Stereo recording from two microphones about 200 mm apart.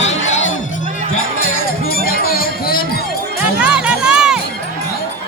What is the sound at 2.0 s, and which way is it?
Music, 45° left (ahead or behind).